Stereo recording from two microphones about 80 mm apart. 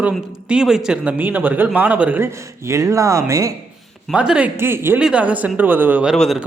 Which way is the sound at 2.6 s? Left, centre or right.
Right.